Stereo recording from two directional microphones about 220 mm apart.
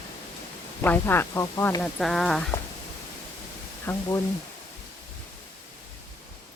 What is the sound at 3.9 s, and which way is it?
Speech, 15° left (ahead or behind).